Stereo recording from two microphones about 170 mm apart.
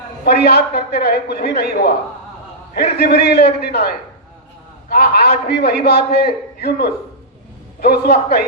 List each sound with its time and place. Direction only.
0.3 s a man's voice: 70° left (ahead or behind)
2.9 s a man's voice: 70° left (ahead or behind)